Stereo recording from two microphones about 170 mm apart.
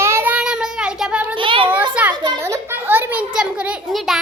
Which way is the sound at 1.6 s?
10° right (ahead or behind).